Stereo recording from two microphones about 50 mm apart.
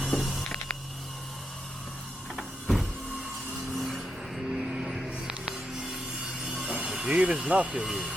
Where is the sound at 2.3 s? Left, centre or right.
Centre.